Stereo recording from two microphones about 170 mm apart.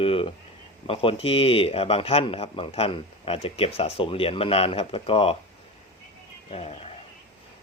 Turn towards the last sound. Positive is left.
turn(degrees=40)  # may be behind; listen again after turning